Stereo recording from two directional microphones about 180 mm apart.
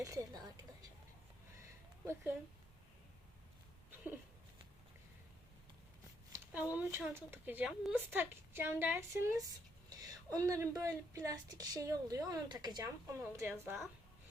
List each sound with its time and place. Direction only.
0.0 s a woman's voice: 20° right (ahead or behind)
6.3 s a woman's voice: 10° right (ahead or behind)